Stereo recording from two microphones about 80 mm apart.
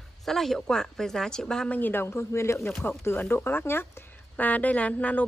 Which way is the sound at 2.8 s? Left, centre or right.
Left.